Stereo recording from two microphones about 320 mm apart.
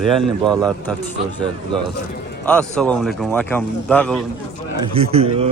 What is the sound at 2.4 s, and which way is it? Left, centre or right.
Speech, centre.